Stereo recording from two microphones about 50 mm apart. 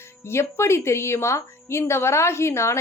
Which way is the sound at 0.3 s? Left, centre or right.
Left.